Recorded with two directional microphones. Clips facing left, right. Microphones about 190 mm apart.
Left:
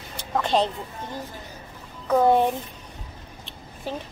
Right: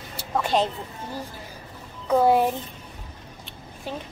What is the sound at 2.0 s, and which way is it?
Speech, 5° right (ahead or behind).